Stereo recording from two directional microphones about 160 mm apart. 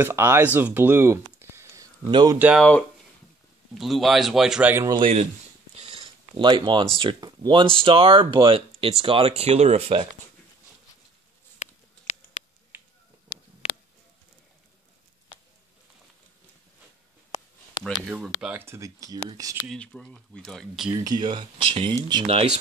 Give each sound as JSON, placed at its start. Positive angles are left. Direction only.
{"t": 0.0, "sound": "speech", "side_deg": -15}
{"t": 2.3, "sound": "speech", "side_deg": -10}
{"t": 3.7, "sound": "speech", "side_deg": 0}
{"t": 4.9, "sound": "speech", "side_deg": -35}
{"t": 5.8, "sound": "a sound", "side_deg": -40}
{"t": 7.0, "sound": "speech", "side_deg": -30}
{"t": 11.6, "sound": "a sound", "side_deg": 45}
{"t": 13.6, "sound": "a sound", "side_deg": 40}
{"t": 17.8, "sound": "a sound", "side_deg": 25}
{"t": 18.2, "sound": "speech", "side_deg": -10}
{"t": 19.6, "sound": "speech", "side_deg": 5}
{"t": 20.9, "sound": "speech", "side_deg": -25}